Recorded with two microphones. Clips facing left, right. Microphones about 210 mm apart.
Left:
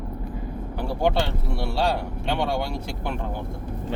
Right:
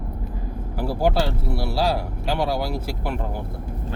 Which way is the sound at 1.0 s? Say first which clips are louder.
Right 1 dB; 5° right (ahead or behind).